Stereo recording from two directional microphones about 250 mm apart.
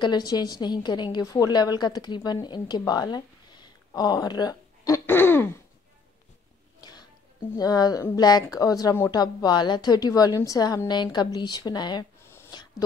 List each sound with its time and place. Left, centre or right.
0.0 s a woman's voice: centre
6.8 s music: centre
7.5 s a woman's voice: centre